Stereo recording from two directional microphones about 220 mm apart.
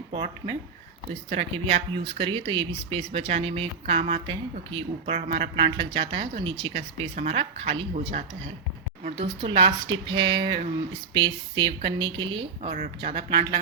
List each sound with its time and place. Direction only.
1.3 s speech: 25° right (ahead or behind)